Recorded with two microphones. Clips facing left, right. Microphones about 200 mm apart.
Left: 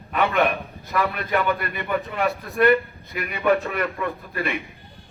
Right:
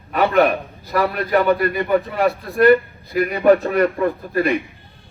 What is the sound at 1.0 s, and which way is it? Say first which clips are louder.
A man's voice: right 5 dB; 30° right (ahead or behind).